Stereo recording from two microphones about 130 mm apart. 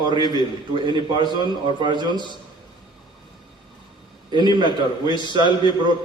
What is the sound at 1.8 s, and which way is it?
Speech, 35° right (ahead or behind).